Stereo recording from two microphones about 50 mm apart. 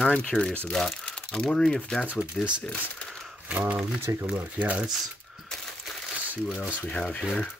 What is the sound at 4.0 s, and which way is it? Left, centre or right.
Speech, right.